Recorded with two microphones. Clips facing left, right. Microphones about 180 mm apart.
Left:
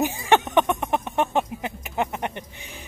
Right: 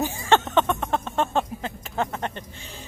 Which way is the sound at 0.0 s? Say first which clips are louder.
Left 1 dB; 15° left (ahead or behind).